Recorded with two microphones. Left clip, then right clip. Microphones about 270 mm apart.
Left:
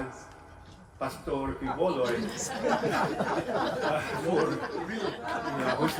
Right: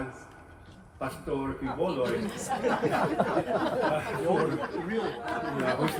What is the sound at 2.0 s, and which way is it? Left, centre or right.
Speech, right.